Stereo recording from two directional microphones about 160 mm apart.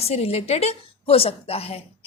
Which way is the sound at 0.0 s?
40° left (ahead or behind).